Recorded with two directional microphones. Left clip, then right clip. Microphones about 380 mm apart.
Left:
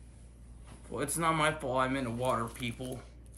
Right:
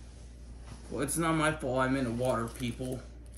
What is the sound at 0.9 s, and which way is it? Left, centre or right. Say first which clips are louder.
Speech: even; centre.